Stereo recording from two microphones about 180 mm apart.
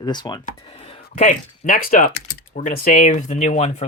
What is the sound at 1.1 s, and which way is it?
Speech, 50° left (ahead or behind).